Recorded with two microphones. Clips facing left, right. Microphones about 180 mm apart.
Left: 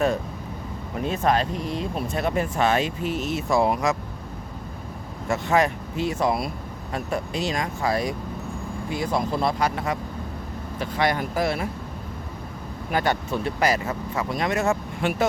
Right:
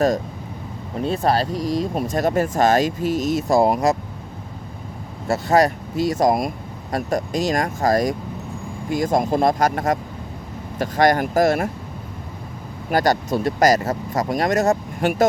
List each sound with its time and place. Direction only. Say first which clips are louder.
1.0 s speech: right 3 dB; 35° right (ahead or behind)
5.3 s speech: right 4 dB; 40° right (ahead or behind)
12.9 s speech: right 5 dB; 40° right (ahead or behind)